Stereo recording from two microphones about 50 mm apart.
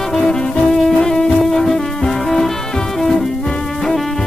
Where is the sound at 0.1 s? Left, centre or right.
Centre.